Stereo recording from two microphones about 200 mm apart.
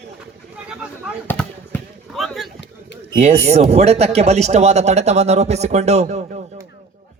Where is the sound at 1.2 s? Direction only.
5° left (ahead or behind).